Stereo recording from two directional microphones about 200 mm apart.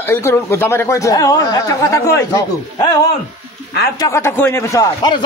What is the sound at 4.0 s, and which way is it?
A man's voice, 15° left (ahead or behind).